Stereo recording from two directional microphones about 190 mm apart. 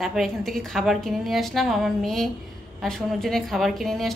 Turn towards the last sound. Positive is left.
turn(degrees=0)  # may be behind; listen again after turning